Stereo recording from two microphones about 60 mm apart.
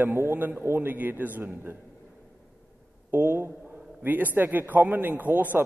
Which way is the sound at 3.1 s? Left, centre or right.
Right.